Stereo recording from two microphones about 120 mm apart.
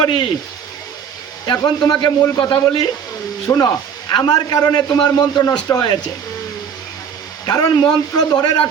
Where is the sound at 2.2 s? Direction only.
30° left (ahead or behind).